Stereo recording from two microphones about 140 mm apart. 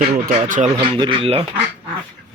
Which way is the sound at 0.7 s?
40° right (ahead or behind).